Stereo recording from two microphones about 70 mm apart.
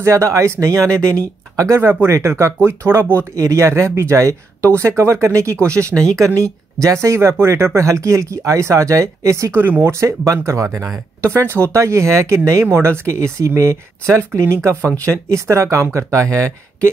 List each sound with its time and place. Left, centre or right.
0.0 s speech: right
1.8 s speech: right
2.1 s speech: right
9.5 s speech: right
9.9 s speech: right
11.1 s speech: right